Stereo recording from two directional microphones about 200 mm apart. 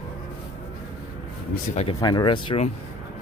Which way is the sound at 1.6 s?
30° left (ahead or behind).